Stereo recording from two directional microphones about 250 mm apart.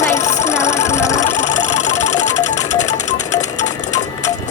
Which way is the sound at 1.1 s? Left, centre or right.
Left.